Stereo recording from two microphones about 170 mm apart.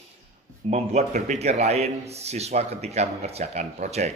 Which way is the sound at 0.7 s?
40° right (ahead or behind).